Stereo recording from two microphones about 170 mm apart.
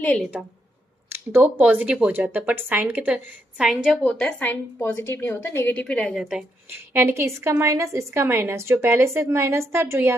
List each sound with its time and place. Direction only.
0.0 s a woman's voice: 10° left (ahead or behind)
1.1 s a woman's voice: 15° right (ahead or behind)
6.7 s a woman's voice: 15° right (ahead or behind)